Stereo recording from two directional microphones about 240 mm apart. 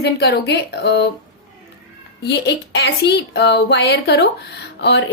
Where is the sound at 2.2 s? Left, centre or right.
Left.